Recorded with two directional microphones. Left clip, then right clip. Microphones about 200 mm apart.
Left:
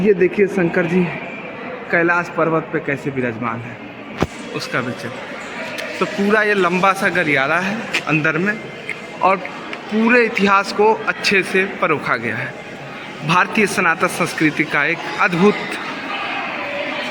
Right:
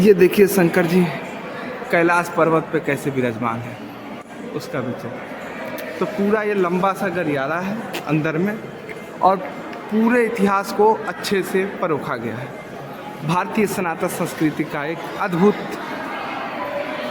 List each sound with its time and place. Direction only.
0.1 s speech: 45° right (ahead or behind)
1.9 s speech: 10° right (ahead or behind)
6.0 s a man's voice: centre (ahead or behind)
8.0 s speech: 10° right (ahead or behind)
10.1 s a man's voice: 10° right (ahead or behind)